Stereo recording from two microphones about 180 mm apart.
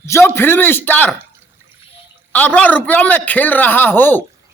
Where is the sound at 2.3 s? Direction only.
10° left (ahead or behind).